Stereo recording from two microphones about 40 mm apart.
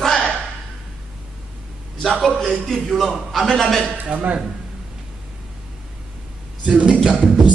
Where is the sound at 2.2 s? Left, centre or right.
Centre.